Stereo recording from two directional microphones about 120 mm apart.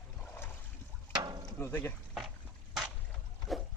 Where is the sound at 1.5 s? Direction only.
20° left (ahead or behind).